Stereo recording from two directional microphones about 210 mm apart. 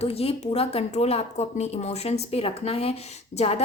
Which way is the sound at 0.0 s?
30° left (ahead or behind).